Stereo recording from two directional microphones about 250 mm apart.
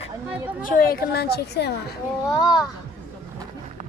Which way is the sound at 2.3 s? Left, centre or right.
Centre.